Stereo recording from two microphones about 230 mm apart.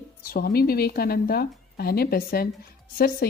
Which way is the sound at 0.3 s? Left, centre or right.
Left.